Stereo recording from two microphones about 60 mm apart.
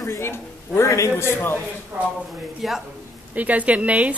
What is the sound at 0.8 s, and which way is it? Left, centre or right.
Speech, left.